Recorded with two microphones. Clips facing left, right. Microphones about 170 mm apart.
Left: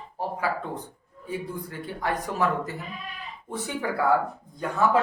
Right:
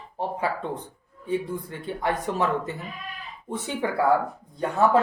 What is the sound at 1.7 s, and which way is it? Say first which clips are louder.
Speech: right 1 dB; 25° right (ahead or behind).